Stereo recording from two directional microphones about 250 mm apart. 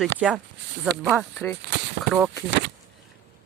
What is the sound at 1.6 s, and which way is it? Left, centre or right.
Speech, right.